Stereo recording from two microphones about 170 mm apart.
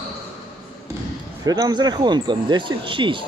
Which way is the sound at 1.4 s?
20° right (ahead or behind).